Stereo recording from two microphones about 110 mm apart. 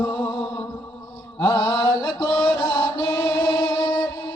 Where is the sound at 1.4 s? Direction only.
15° left (ahead or behind).